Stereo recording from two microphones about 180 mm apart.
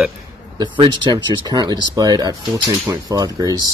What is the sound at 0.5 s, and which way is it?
Speech, 25° right (ahead or behind).